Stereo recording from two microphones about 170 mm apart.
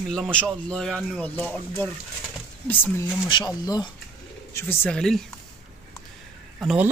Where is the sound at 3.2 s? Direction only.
25° left (ahead or behind).